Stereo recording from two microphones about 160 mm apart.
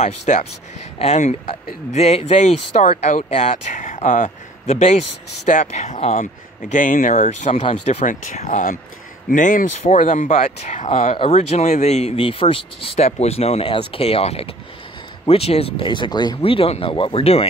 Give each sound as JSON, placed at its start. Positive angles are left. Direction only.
{"t": 0.0, "sound": "speech", "side_deg": 45}
{"t": 16.3, "sound": "speech", "side_deg": 35}